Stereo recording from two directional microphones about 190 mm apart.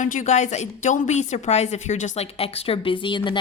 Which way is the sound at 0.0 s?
40° left (ahead or behind).